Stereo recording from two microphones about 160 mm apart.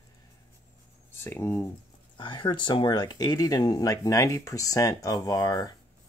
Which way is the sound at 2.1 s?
30° left (ahead or behind).